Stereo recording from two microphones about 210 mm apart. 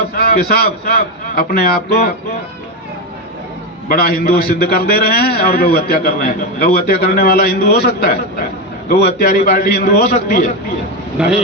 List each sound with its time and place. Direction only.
0.2 s a man's voice: 50° left (ahead or behind)
3.8 s a man's voice: 45° left (ahead or behind)
11.2 s speech: 5° right (ahead or behind)